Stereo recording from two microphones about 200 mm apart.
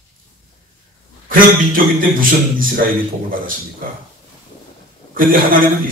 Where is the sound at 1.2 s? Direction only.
45° right (ahead or behind).